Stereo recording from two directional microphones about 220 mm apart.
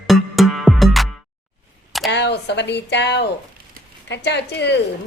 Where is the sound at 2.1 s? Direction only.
50° left (ahead or behind).